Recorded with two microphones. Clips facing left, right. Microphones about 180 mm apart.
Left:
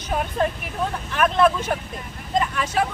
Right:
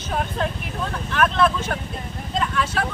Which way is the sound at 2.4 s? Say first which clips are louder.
Left 1 dB; 15° left (ahead or behind).